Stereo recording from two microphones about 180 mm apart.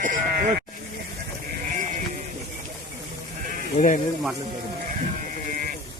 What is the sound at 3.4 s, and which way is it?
Sheep, 50° right (ahead or behind).